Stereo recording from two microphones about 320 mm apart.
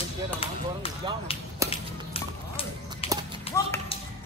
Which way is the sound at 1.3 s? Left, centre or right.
Centre.